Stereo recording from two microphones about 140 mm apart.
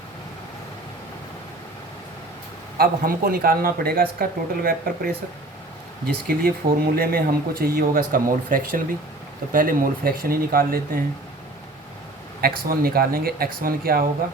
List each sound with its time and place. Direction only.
2.7 s speech: 90° right
6.2 s speech: 90° right
12.4 s speech: 90° right